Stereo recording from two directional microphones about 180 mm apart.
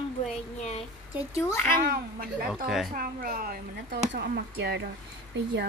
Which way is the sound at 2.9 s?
55° right (ahead or behind).